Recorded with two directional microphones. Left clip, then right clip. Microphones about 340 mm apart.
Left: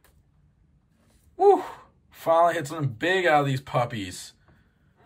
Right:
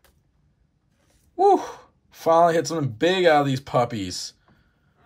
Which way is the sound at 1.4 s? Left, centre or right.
Centre.